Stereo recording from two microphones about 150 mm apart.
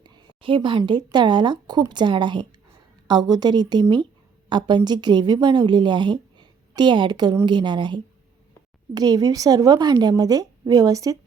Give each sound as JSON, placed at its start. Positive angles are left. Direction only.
{"t": 0.0, "sound": "a woman's voice", "side_deg": -30}